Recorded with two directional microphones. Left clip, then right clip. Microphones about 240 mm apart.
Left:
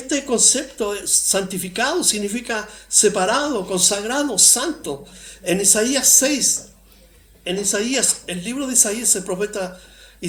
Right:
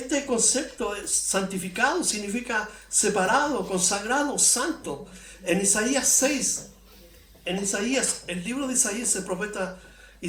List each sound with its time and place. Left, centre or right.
0.1 s speech: left